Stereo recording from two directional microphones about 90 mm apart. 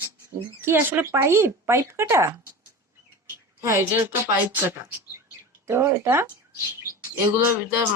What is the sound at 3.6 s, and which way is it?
Speech, 30° right (ahead or behind).